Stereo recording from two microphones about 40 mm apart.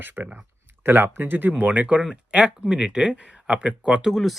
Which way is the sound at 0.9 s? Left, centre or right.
Right.